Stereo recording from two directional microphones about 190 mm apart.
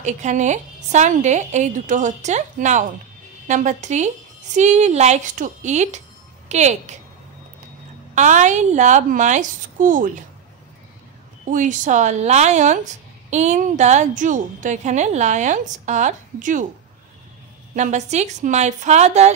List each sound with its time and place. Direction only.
0.0 s a woman's voice: 40° right (ahead or behind)
8.1 s a woman's voice: 40° right (ahead or behind)
11.5 s a woman's voice: 40° right (ahead or behind)
17.7 s a woman's voice: 40° right (ahead or behind)